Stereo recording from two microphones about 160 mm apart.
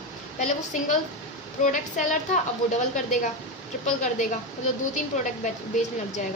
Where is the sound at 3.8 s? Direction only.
50° left (ahead or behind).